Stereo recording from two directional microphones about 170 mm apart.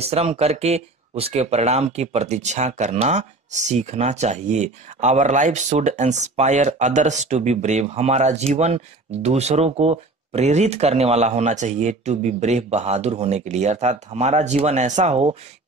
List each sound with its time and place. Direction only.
0.0 s speech: 35° right (ahead or behind)